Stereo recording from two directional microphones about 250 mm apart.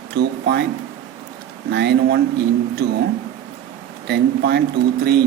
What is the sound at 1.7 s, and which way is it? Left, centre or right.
Speech, right.